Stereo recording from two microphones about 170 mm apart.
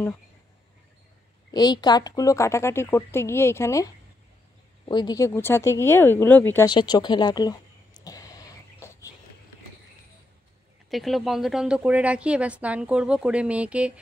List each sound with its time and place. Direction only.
1.5 s a woman's voice: 25° left (ahead or behind)
6.6 s a sound: 25° left (ahead or behind)
10.9 s speech: centre (ahead or behind)